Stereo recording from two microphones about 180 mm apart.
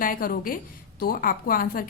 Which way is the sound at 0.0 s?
50° left (ahead or behind).